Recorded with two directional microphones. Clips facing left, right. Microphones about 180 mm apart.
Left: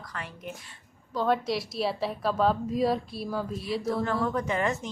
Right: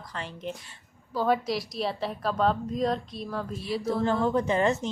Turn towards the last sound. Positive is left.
turn(degrees=-30)  # may be behind; listen again after turning